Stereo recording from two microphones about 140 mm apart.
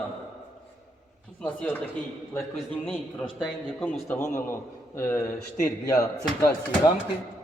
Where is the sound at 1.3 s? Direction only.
10° left (ahead or behind).